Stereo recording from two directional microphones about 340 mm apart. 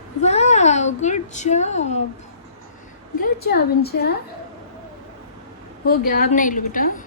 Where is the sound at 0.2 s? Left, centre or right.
Centre.